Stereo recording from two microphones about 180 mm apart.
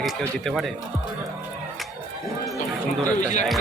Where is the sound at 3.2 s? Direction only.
45° left (ahead or behind).